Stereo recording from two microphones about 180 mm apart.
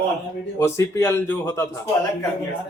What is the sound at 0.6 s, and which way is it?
Speech, 15° left (ahead or behind).